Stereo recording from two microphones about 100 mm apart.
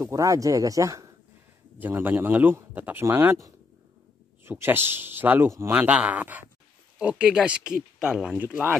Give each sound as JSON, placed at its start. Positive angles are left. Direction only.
{"t": 0.0, "sound": "speech", "side_deg": -35}
{"t": 1.8, "sound": "a man's voice", "side_deg": -20}
{"t": 4.5, "sound": "a man's voice", "side_deg": -20}